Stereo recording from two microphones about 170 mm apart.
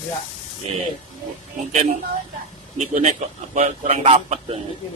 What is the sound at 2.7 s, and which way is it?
Speech, 45° right (ahead or behind).